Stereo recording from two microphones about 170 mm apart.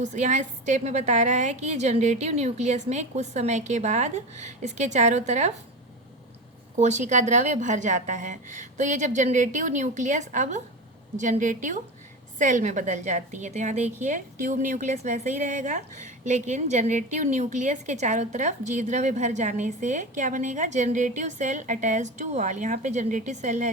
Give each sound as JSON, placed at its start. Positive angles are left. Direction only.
{"t": 0.0, "sound": "a woman's voice", "side_deg": -45}
{"t": 6.7, "sound": "a woman's voice", "side_deg": -45}